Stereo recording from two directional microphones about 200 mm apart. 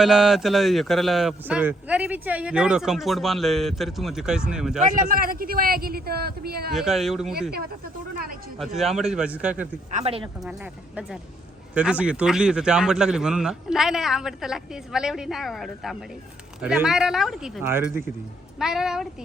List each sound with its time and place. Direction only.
0.0 s a man's voice: centre (ahead or behind)
4.9 s speech: 40° right (ahead or behind)
6.7 s a man's voice: centre (ahead or behind)
8.5 s a man's voice: centre (ahead or behind)
9.9 s speech: 30° right (ahead or behind)
11.7 s a man's voice: 5° right (ahead or behind)